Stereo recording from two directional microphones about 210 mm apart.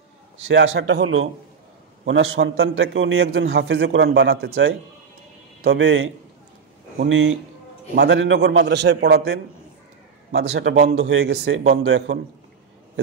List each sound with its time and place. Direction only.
0.5 s a man's voice: 65° right (ahead or behind)
2.0 s a man's voice: 60° right (ahead or behind)
11.7 s a man's voice: 70° right (ahead or behind)